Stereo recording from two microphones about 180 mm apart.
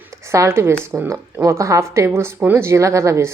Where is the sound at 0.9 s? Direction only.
15° right (ahead or behind).